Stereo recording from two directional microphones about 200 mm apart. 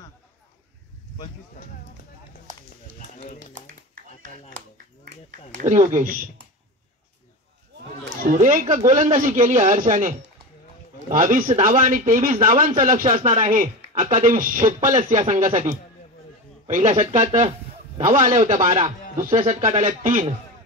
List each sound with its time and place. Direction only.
3.5 s clapping: 40° right (ahead or behind)
5.9 s speech: 45° right (ahead or behind)
8.2 s speech: 40° right (ahead or behind)